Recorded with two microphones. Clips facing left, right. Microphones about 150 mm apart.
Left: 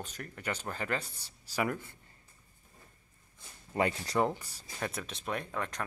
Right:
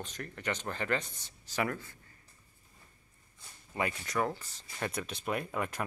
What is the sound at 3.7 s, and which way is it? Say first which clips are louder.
Speech: left 4 dB; 30° left (ahead or behind).